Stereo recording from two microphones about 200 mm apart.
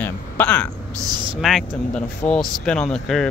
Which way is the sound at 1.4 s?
Centre (ahead or behind).